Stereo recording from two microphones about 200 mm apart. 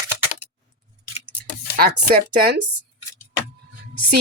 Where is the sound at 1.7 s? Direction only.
50° right (ahead or behind).